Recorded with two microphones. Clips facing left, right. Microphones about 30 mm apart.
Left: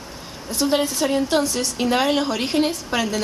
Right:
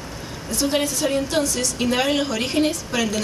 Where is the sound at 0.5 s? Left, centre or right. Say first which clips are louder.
Left 1 dB; left.